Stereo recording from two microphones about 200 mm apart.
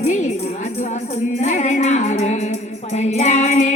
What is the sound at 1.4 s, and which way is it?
Music, 35° left (ahead or behind).